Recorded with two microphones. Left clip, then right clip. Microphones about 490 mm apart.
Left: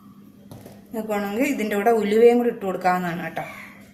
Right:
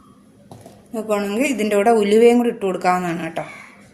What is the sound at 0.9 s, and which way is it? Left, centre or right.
A woman's voice, left.